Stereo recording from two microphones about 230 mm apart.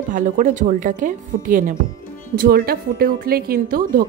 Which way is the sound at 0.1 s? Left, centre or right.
Right.